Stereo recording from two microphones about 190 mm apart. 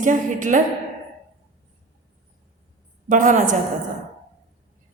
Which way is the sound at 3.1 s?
40° right (ahead or behind).